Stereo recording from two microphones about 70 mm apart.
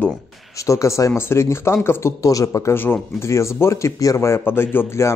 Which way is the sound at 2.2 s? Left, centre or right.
Left.